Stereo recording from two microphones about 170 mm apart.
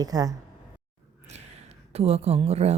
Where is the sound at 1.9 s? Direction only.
35° right (ahead or behind).